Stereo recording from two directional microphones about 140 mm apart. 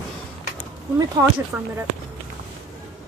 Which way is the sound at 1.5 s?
10° right (ahead or behind).